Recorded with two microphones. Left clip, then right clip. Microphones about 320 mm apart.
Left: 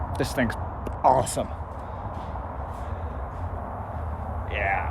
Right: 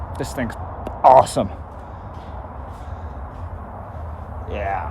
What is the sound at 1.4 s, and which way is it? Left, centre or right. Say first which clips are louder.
Speech: right 7 dB; right.